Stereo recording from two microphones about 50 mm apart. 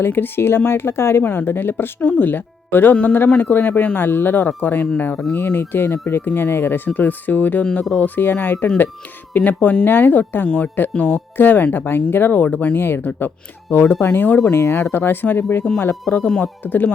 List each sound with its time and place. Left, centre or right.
0.0 s speech: left
2.0 s speech: left
2.9 s speech: left
7.6 s speech: left
7.9 s speech: left
12.8 s speech: left
14.5 s speech: left
15.0 s speech: left
16.0 s speech: centre
16.6 s speech: left